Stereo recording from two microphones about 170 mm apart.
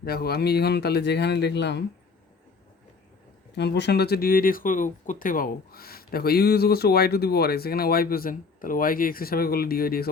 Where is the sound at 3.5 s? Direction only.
85° left.